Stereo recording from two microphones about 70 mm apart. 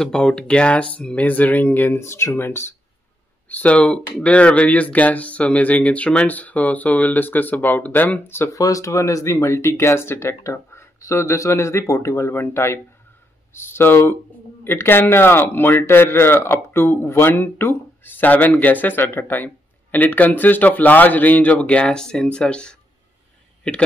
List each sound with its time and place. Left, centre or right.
0.0 s a man's voice: centre
2.0 s speech: left
3.4 s a man's voice: left
8.5 s a man's voice: left; by 22.8 s centre